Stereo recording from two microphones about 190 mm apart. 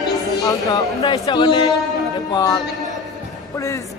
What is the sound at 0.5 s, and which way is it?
A man's voice, 20° left (ahead or behind).